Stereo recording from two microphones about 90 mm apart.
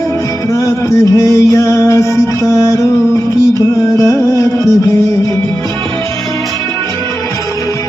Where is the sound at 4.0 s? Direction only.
35° left (ahead or behind).